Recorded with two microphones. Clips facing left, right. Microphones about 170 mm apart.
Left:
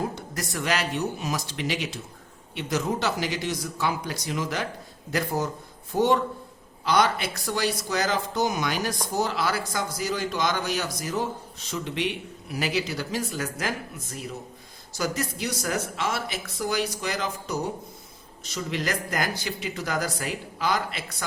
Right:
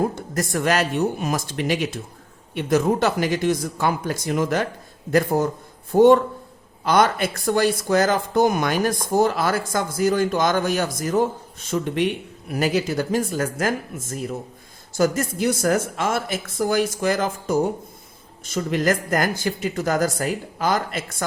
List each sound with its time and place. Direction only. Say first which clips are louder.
0.2 s speech: right 7 dB; 50° right (ahead or behind)